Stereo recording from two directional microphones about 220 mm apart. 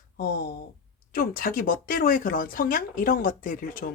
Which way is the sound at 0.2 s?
45° left (ahead or behind).